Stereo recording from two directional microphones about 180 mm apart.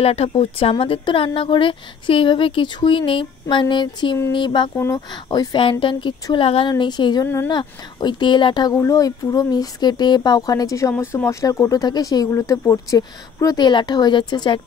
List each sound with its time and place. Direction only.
0.0 s speech: 35° left (ahead or behind)